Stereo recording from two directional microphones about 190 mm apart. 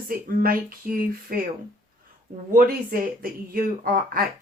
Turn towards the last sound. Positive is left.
turn(degrees=-45)  # may be behind; listen again after turning